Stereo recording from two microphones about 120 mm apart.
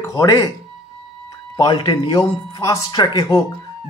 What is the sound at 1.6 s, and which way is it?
Speech, 40° left (ahead or behind).